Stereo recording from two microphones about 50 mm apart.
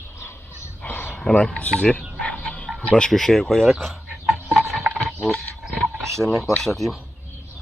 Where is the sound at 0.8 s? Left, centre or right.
Left.